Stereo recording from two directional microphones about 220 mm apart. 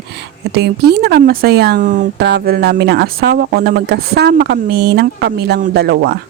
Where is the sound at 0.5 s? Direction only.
45° right (ahead or behind).